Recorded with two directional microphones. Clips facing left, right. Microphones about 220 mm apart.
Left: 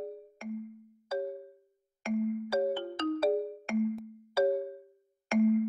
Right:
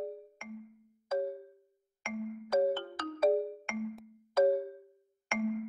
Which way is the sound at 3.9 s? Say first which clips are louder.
Right 1 dB; 5° left (ahead or behind).